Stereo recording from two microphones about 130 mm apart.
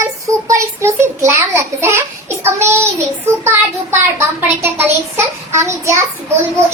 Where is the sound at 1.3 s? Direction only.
20° right (ahead or behind).